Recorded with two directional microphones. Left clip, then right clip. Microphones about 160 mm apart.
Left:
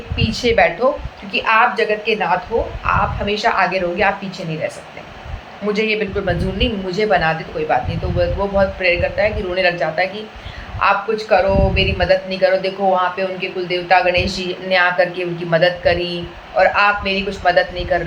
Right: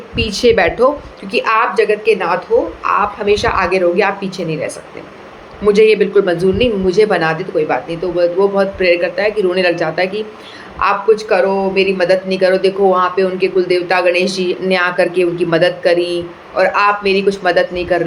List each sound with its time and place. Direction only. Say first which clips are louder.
0.2 s speech: right 3 dB; 50° right (ahead or behind)
1.3 s speech: right 1 dB; 45° right (ahead or behind)
5.6 s speech: right 9 dB; 50° right (ahead or behind)
8.5 s speech: right 3 dB; 50° right (ahead or behind)